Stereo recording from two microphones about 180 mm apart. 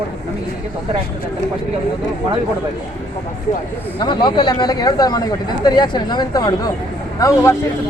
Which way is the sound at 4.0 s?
25° left (ahead or behind).